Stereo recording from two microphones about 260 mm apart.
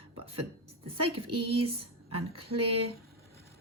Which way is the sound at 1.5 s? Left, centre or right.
Right.